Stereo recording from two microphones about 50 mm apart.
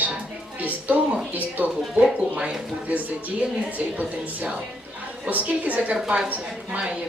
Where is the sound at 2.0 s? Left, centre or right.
Centre.